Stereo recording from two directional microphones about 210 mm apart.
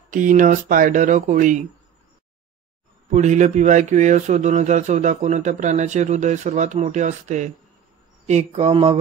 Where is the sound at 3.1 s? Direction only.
35° right (ahead or behind).